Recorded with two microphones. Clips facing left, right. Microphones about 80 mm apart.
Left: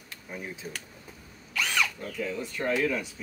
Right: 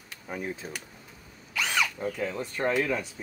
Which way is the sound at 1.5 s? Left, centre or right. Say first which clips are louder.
Even; centre.